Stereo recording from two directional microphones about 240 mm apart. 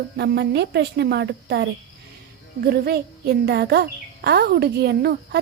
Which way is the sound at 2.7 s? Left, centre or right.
Right.